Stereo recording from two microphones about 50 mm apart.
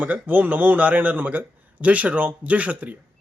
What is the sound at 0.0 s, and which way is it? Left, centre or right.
A man's voice, right.